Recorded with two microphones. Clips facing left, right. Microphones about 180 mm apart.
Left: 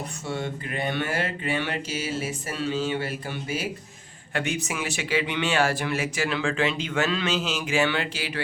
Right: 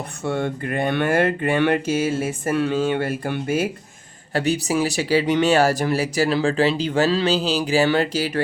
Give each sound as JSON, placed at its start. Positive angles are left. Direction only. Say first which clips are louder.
{"t": 0.3, "sound": "speech", "louder": "right 8 dB", "side_deg": -55}
{"t": 4.4, "sound": "speech", "louder": "right 8 dB", "side_deg": -35}